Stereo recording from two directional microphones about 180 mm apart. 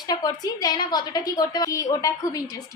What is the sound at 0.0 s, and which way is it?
A woman's voice, 20° left (ahead or behind).